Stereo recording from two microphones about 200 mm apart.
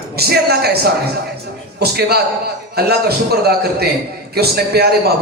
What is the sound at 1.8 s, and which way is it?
A man's voice, 55° right (ahead or behind).